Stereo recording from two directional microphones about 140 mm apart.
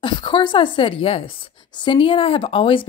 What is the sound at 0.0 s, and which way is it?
Speech, 35° left (ahead or behind).